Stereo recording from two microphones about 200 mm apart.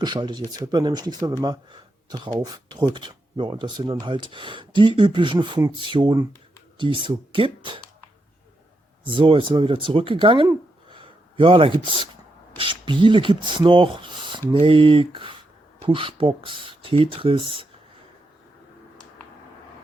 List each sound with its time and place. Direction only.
0.0 s speech: 20° right (ahead or behind)
9.0 s a man's voice: 25° right (ahead or behind)